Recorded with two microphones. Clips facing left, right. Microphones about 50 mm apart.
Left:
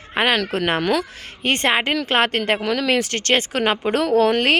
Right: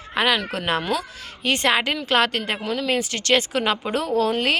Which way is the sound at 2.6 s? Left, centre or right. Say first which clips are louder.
Left 4 dB; left.